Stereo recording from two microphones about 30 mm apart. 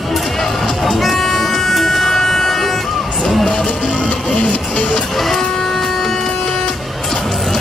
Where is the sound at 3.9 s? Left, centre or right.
Left.